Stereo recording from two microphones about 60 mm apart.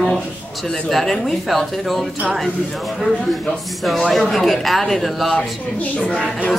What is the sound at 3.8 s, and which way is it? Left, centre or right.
Speech, centre.